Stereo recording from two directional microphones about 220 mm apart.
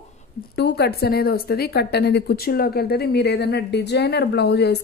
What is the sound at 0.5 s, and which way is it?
A woman's voice, 50° left (ahead or behind).